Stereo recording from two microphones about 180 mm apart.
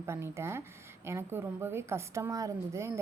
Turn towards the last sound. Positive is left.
turn(degrees=-15)  # may be behind; listen again after turning